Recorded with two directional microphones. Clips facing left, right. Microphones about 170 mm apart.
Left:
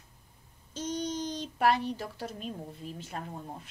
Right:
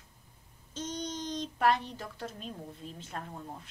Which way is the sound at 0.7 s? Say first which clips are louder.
Left 4 dB; 10° left (ahead or behind).